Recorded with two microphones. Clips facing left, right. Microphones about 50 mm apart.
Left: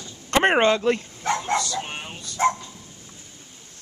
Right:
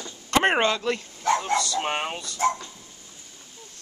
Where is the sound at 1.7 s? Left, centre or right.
Right.